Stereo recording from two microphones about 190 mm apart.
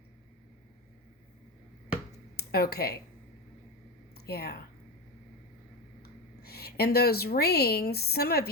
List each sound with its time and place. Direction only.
2.3 s speech: 55° left (ahead or behind)
4.1 s a sound: 55° left (ahead or behind)
6.0 s a woman's voice: 55° left (ahead or behind)